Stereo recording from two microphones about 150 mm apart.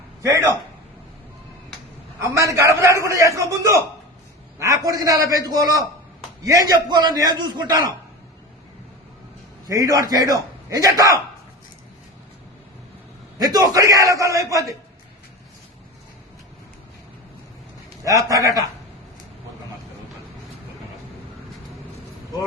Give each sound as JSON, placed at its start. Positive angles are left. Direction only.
{"t": 0.2, "sound": "a man's voice", "side_deg": -20}
{"t": 2.2, "sound": "a man's voice", "side_deg": -20}
{"t": 9.6, "sound": "a man's voice", "side_deg": -25}
{"t": 13.4, "sound": "a man's voice", "side_deg": -25}
{"t": 18.0, "sound": "a man's voice", "side_deg": -20}